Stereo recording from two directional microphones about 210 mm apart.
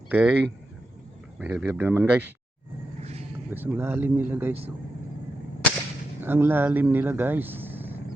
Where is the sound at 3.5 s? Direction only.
10° right (ahead or behind).